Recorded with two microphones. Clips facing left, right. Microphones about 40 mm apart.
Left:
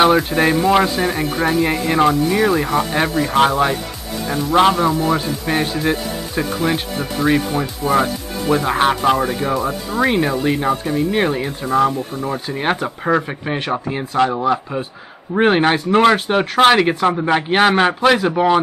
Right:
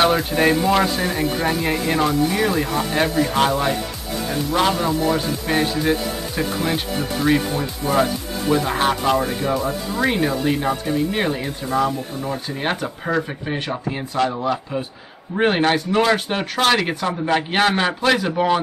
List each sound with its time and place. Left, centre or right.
0.0 s a sound: centre
0.3 s speech: centre
15.9 s speech: left